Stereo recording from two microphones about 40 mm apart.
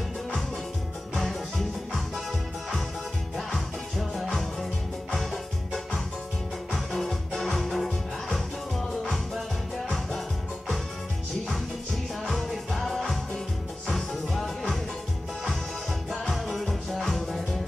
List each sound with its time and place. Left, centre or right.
3.3 s music: centre
4.1 s music: centre
12.3 s music: centre
16.1 s music: centre